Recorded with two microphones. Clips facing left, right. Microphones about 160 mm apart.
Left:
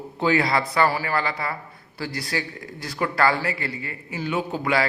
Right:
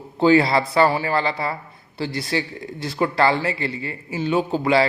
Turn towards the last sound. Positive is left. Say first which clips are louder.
# right 5 dB
turn(degrees=-30)  # may be behind; listen again after turning